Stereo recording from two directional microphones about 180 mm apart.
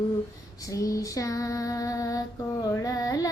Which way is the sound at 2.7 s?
20° left (ahead or behind).